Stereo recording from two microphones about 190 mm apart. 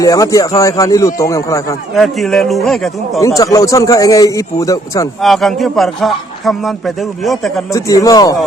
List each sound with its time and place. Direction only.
0.0 s a man's voice: 15° left (ahead or behind)
2.0 s a man's voice: centre (ahead or behind)
3.2 s a man's voice: 15° left (ahead or behind)
5.2 s a man's voice: centre (ahead or behind)
7.7 s speech: 15° left (ahead or behind)